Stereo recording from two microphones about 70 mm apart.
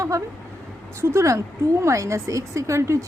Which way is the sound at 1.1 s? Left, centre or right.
Right.